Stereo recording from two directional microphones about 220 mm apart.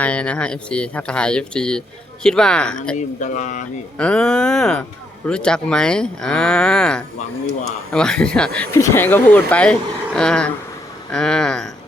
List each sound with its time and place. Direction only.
0.0 s speech: 5° left (ahead or behind)
3.2 s speech: 35° left (ahead or behind)
3.9 s speech: 5° left (ahead or behind)